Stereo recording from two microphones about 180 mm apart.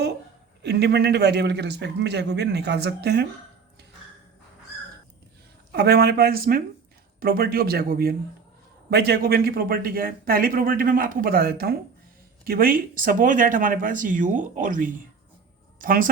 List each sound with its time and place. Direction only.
0.6 s a man's voice: 65° right (ahead or behind)
5.7 s speech: 65° right (ahead or behind)